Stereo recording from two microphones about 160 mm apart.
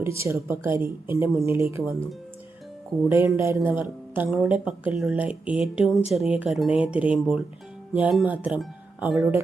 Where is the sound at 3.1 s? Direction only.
20° right (ahead or behind).